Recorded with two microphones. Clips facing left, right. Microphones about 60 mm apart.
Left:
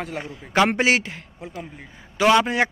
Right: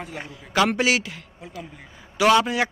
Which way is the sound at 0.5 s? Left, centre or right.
Left.